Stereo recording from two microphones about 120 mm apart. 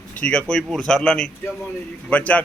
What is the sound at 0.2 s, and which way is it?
Speech, 10° left (ahead or behind).